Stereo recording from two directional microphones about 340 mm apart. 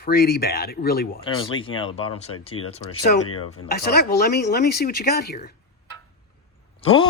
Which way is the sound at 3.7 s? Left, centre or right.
Left.